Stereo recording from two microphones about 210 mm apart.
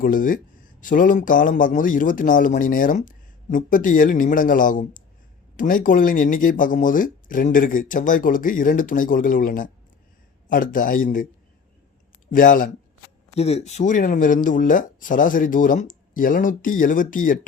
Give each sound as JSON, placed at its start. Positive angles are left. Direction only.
{"t": 0.0, "sound": "speech", "side_deg": 40}
{"t": 12.3, "sound": "speech", "side_deg": 40}
{"t": 13.3, "sound": "speech", "side_deg": 30}